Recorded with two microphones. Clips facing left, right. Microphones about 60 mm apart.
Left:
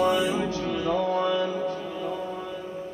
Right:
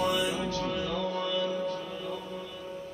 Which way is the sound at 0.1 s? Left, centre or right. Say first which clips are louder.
Left 5 dB; left.